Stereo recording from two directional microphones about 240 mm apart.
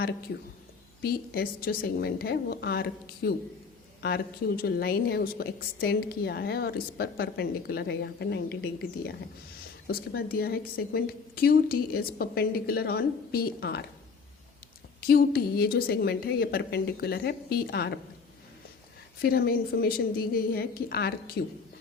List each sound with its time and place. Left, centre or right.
1.0 s a woman's voice: left
15.0 s a woman's voice: left
19.2 s a woman's voice: left